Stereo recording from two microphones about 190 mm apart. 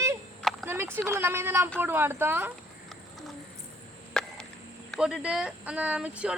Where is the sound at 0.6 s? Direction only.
10° right (ahead or behind).